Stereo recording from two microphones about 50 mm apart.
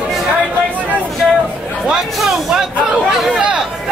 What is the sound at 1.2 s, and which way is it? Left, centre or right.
Chatter, centre.